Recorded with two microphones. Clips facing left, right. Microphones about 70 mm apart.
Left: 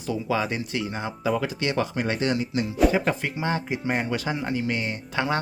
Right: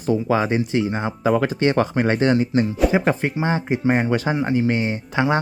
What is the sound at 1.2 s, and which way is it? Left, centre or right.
Speech, right.